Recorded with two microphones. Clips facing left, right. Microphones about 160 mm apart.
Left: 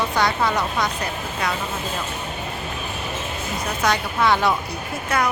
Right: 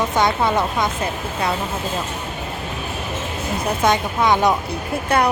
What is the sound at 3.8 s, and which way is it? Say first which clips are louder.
Speech: right 2 dB; 20° right (ahead or behind).